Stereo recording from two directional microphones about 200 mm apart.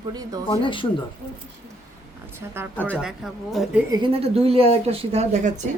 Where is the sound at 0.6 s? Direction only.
25° left (ahead or behind).